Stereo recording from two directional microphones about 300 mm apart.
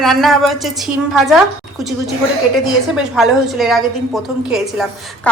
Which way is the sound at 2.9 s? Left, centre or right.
Centre.